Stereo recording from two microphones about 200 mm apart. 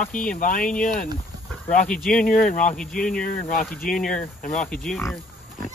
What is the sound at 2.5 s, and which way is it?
Speech, 40° left (ahead or behind).